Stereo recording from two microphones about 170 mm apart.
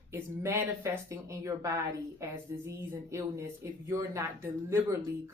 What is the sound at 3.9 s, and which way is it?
Speech, 15° right (ahead or behind).